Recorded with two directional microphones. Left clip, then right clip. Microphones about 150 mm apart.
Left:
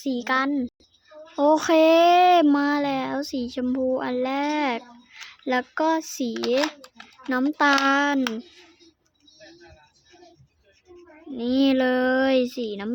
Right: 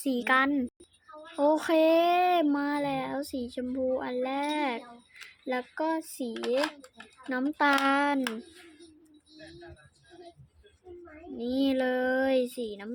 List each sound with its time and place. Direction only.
0.0 s a child's voice: 15° left (ahead or behind)
1.4 s speech: 30° left (ahead or behind)
11.3 s speech: 25° left (ahead or behind)